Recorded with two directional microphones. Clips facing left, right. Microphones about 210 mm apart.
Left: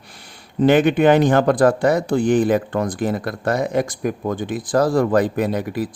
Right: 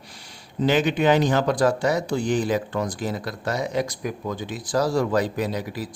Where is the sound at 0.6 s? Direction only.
55° left (ahead or behind).